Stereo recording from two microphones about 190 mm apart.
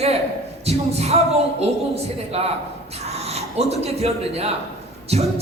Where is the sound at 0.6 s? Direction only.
35° right (ahead or behind).